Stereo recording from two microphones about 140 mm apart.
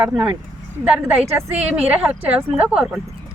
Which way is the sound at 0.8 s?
10° right (ahead or behind).